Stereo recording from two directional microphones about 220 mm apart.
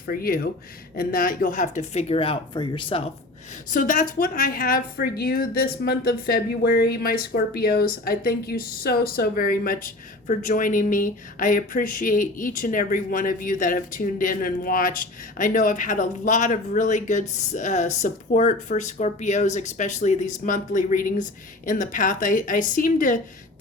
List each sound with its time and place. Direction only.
0.0 s a woman's voice: 40° left (ahead or behind); by 3.0 s 20° left (ahead or behind)
3.7 s a woman's voice: 35° left (ahead or behind)